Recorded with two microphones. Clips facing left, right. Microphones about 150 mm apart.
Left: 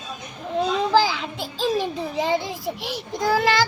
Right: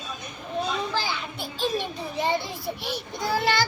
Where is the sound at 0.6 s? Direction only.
90° left.